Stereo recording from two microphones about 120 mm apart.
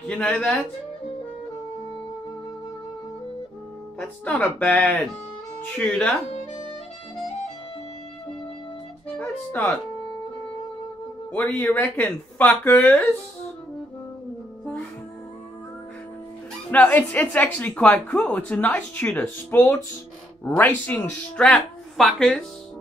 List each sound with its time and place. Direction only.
0.0 s a woman's voice: 10° left (ahead or behind)
4.0 s a woman's voice: 10° left (ahead or behind)
9.2 s speech: 20° left (ahead or behind)
11.5 s a woman's voice: 15° left (ahead or behind)
16.9 s a woman's voice: 15° left (ahead or behind)